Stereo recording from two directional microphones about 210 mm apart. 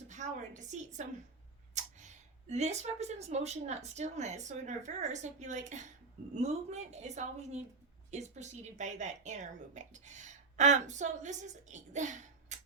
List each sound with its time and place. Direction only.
0.1 s a woman's voice: 35° right (ahead or behind)
1.8 s a sound: 35° right (ahead or behind)
2.5 s a woman's voice: 30° right (ahead or behind)